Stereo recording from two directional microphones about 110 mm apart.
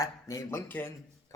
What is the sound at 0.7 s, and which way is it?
Speech, 20° left (ahead or behind).